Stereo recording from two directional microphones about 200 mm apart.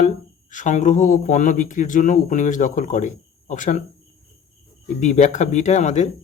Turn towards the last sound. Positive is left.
turn(degrees=35)  # may be behind; listen again after turning